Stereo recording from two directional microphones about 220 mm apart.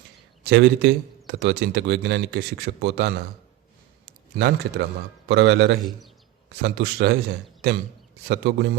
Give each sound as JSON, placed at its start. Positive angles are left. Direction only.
{"t": 0.4, "sound": "a man's voice", "side_deg": -50}
{"t": 8.3, "sound": "a man's voice", "side_deg": -50}